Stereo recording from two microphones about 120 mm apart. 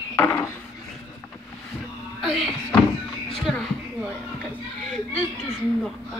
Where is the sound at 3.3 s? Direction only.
5° left (ahead or behind).